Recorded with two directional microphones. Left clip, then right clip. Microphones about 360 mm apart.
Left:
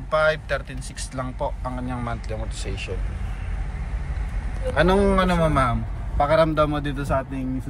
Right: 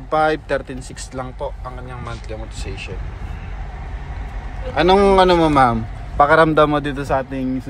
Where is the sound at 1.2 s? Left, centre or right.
Centre.